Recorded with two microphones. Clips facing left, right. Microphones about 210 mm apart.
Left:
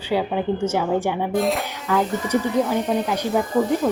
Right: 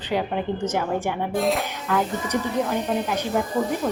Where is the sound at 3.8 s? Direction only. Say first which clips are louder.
Left 3 dB; 5° right (ahead or behind).